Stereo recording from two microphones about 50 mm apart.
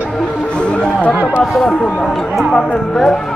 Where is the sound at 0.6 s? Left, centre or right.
Left.